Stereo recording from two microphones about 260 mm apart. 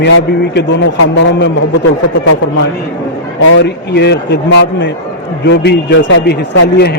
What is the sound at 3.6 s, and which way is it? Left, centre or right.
A man's voice, left.